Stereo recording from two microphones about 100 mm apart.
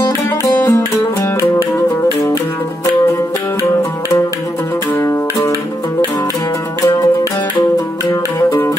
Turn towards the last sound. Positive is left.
turn(degrees=35)  # may be behind; listen again after turning